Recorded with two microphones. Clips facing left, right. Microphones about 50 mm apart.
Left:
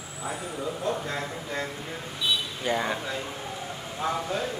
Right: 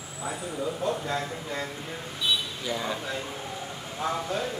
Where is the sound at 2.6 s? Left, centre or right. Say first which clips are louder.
Left 4 dB; left.